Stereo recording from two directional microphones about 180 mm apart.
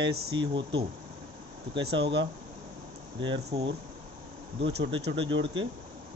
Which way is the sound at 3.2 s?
30° right (ahead or behind).